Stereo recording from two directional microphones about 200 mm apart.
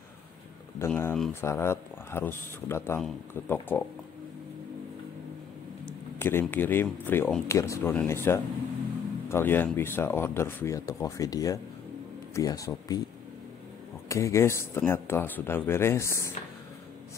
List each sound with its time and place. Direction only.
0.7 s speech: 10° left (ahead or behind)
6.1 s speech: 10° left (ahead or behind)
14.0 s speech: 15° left (ahead or behind)